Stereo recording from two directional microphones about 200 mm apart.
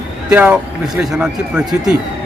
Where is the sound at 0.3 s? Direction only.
5° right (ahead or behind).